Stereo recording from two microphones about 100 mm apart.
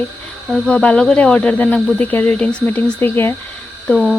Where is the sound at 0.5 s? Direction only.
10° left (ahead or behind).